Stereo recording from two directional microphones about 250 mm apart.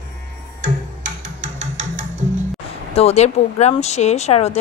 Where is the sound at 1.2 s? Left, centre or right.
Right.